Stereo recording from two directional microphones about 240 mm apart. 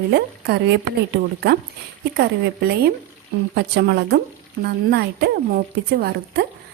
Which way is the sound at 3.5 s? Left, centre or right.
Right.